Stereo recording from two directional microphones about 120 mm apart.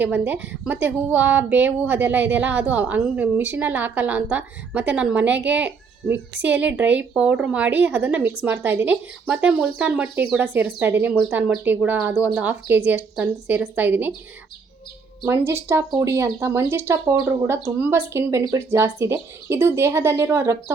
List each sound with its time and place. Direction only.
0.0 s speech: 15° right (ahead or behind)
15.2 s speech: 20° right (ahead or behind)